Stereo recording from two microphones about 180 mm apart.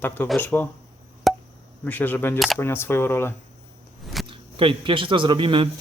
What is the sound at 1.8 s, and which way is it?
Speech, 10° left (ahead or behind).